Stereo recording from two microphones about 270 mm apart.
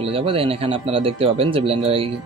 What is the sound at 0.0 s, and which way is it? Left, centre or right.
Speech, centre.